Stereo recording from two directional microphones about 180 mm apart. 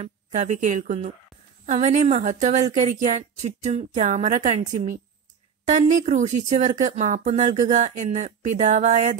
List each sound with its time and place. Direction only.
0.0 s a woman's voice: 40° right (ahead or behind)